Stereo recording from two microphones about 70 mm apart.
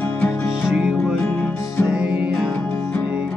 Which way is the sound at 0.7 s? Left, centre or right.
Centre.